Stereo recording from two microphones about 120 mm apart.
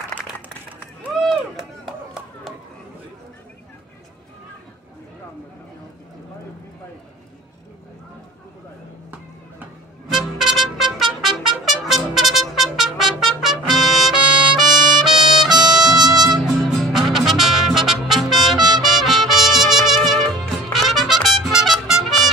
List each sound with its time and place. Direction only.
1.2 s chop: centre (ahead or behind)
10.1 s trumpet: centre (ahead or behind)
15.9 s music: 35° right (ahead or behind)
16.8 s music: centre (ahead or behind)